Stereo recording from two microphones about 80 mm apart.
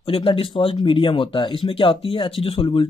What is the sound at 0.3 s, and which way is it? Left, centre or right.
Speech, left.